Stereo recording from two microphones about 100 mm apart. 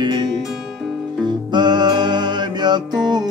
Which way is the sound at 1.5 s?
45° right (ahead or behind).